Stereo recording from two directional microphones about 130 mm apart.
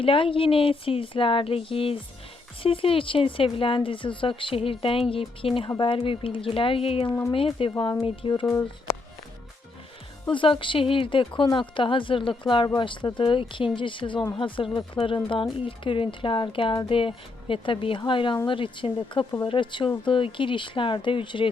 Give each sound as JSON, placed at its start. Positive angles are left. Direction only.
{"t": 0.0, "sound": "speech", "side_deg": 45}
{"t": 10.3, "sound": "speech", "side_deg": 40}